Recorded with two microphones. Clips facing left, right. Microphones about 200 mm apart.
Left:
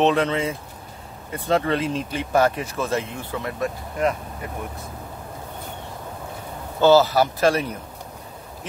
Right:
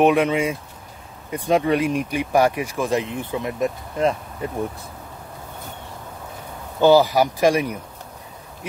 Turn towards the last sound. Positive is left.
turn(degrees=-15)  # may be behind; listen again after turning